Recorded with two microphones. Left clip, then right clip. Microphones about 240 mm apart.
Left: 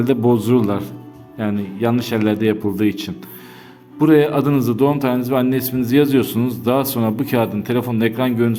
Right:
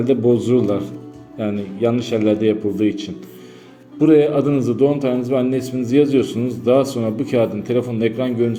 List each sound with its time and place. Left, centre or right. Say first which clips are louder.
0.0 s a man's voice: even; left